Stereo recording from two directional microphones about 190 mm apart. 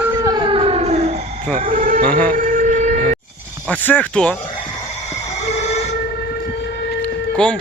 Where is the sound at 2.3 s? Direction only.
45° right (ahead or behind).